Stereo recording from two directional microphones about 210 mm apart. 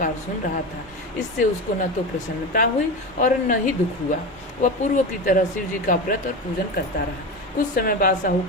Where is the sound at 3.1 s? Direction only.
40° left (ahead or behind).